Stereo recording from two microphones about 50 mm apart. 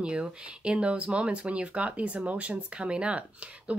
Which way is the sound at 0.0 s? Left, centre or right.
Right.